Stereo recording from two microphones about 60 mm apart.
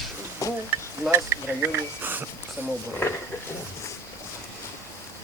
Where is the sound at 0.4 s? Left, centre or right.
Left.